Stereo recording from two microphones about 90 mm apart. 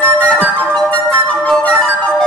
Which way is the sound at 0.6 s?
15° left (ahead or behind).